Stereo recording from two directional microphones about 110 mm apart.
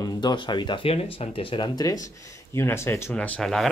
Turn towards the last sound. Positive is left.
turn(degrees=5)  # may be behind; listen again after turning